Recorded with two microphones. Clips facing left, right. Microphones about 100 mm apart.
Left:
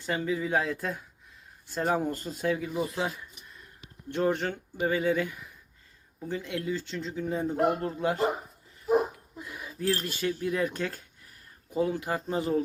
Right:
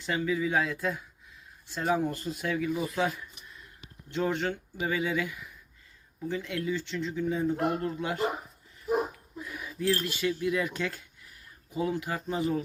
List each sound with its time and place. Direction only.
0.0 s speech: 40° left (ahead or behind)
4.1 s speech: 45° left (ahead or behind)
9.4 s speech: 30° left (ahead or behind)